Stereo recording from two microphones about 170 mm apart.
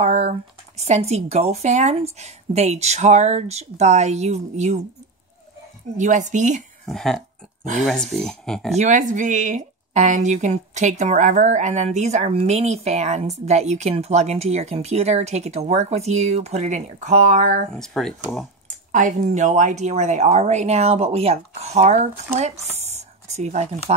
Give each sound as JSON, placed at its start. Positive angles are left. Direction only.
{"t": 0.0, "sound": "speech", "side_deg": -40}
{"t": 5.9, "sound": "speech", "side_deg": -45}
{"t": 6.9, "sound": "speech", "side_deg": 0}
{"t": 8.7, "sound": "speech", "side_deg": -45}
{"t": 17.7, "sound": "speech", "side_deg": 0}
{"t": 18.9, "sound": "speech", "side_deg": -50}
{"t": 22.8, "sound": "whispering", "side_deg": -40}